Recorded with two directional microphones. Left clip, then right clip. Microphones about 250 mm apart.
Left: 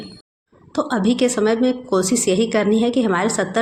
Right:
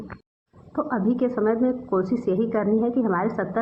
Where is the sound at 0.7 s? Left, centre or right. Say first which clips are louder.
Left 5 dB; left.